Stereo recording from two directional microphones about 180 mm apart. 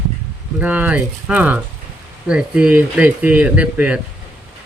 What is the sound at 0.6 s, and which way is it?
Speech, 10° right (ahead or behind).